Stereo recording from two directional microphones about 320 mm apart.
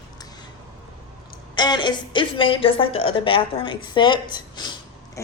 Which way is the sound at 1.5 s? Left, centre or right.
Centre.